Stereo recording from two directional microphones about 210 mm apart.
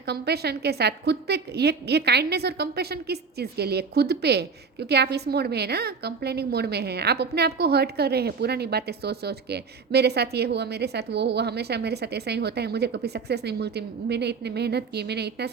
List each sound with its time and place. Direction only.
0.0 s a woman's voice: 50° right (ahead or behind)